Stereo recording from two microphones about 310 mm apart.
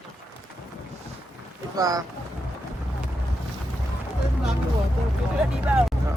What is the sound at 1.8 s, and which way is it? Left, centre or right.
Speech, centre.